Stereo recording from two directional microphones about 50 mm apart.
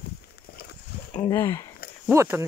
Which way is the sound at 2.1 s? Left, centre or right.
Right.